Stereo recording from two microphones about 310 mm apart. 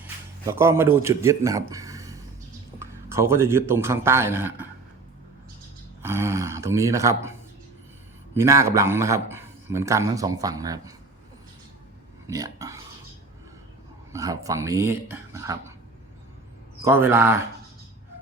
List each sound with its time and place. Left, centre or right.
0.4 s a man's voice: centre
6.0 s speech: centre
8.4 s a man's voice: centre
12.3 s a man's voice: centre
14.1 s a man's voice: centre
16.8 s a man's voice: centre